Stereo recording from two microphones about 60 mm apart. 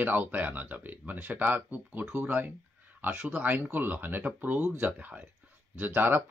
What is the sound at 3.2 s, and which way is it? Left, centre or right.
Speech, right.